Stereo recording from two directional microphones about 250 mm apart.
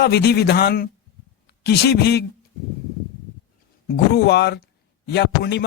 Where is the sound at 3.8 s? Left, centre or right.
Left.